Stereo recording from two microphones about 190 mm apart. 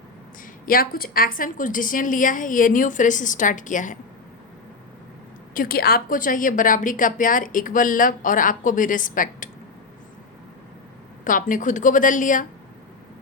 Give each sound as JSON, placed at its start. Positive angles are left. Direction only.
{"t": 0.6, "sound": "a woman's voice", "side_deg": 50}
{"t": 5.5, "sound": "a woman's voice", "side_deg": 50}
{"t": 11.3, "sound": "a woman's voice", "side_deg": 45}